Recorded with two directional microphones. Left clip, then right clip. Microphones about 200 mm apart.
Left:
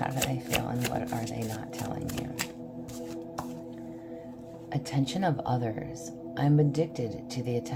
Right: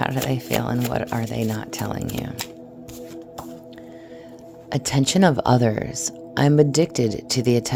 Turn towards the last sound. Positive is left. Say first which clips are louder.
# right 12 dB
turn(degrees=-60)  # may be behind; listen again after turning